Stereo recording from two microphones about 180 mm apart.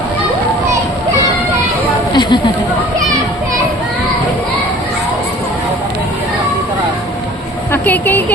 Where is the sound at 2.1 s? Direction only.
25° left (ahead or behind).